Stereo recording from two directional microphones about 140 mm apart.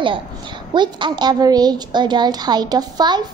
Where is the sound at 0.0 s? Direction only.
35° right (ahead or behind).